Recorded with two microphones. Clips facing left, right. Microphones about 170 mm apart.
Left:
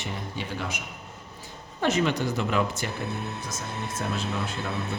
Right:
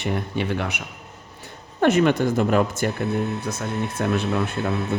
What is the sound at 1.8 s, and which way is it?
Speech, 55° right (ahead or behind).